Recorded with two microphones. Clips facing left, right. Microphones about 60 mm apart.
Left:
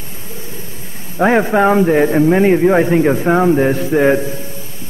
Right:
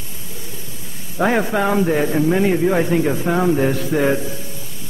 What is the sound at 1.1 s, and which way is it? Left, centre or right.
A man's voice, left.